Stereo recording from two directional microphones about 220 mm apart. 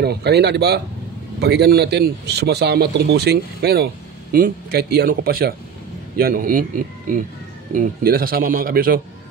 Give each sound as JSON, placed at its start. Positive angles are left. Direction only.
{"t": 0.0, "sound": "a man's voice", "side_deg": -50}
{"t": 7.7, "sound": "a man's voice", "side_deg": -40}